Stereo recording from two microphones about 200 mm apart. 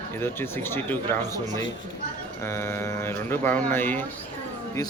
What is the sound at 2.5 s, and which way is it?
Speech, 15° left (ahead or behind).